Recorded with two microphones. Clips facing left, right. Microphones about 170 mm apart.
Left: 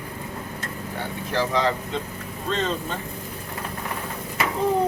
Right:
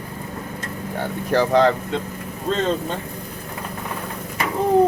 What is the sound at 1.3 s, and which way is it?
Speech, 55° right (ahead or behind).